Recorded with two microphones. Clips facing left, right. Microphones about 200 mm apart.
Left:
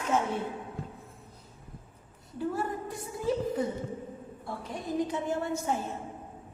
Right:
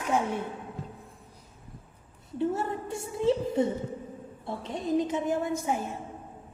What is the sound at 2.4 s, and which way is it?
A woman's voice, 25° right (ahead or behind).